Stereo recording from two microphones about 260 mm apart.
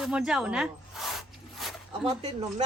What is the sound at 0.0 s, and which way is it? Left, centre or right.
A woman's voice, centre.